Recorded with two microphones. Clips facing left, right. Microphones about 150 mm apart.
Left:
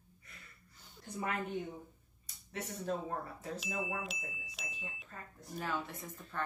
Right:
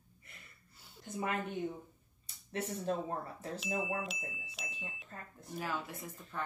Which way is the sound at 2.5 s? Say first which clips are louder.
Right 3 dB; 30° right (ahead or behind).